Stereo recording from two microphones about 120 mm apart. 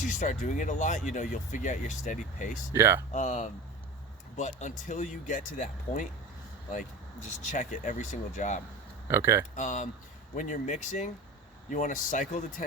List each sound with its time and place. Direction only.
0.0 s speech: 90° left
2.7 s speech: 20° right (ahead or behind)
3.1 s speech: 90° left
9.0 s speech: 25° right (ahead or behind)
9.6 s speech: 90° left
11.7 s speech: 90° left